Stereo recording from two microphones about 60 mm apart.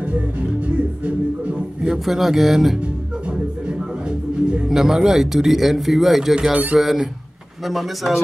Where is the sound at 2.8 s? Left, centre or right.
Centre.